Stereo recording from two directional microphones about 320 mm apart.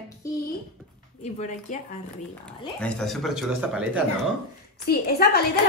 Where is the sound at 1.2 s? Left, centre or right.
Left.